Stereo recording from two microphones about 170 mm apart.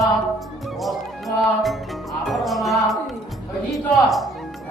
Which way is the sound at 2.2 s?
Centre (ahead or behind).